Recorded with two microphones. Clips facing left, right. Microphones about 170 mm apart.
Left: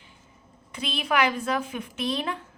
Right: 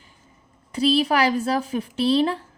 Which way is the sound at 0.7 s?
35° right (ahead or behind).